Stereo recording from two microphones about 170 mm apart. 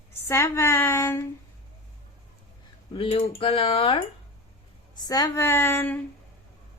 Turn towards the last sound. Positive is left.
turn(degrees=10)  # may be behind; listen again after turning